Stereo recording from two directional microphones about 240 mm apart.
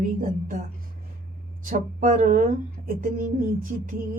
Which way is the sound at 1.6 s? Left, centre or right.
Right.